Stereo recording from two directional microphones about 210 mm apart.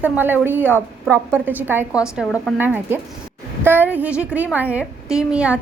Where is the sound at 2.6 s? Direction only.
10° right (ahead or behind).